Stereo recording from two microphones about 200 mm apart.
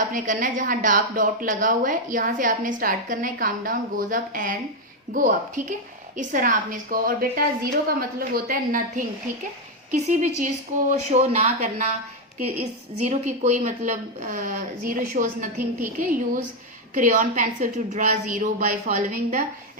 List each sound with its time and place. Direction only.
0.1 s a woman's voice: 40° right (ahead or behind)
13.0 s speech: 35° right (ahead or behind)
16.9 s speech: 40° right (ahead or behind)